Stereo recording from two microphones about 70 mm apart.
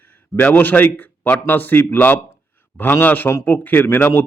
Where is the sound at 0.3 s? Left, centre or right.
Left.